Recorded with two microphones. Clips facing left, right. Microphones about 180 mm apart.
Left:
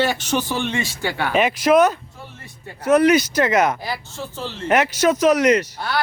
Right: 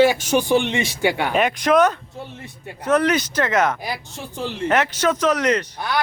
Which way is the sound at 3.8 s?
15° right (ahead or behind).